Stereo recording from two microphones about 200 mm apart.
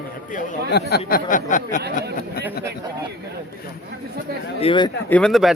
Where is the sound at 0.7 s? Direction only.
50° left (ahead or behind).